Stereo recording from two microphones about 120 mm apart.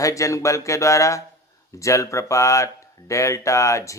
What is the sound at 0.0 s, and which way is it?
Speech, 25° left (ahead or behind).